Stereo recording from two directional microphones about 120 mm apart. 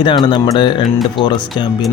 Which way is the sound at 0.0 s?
45° left (ahead or behind).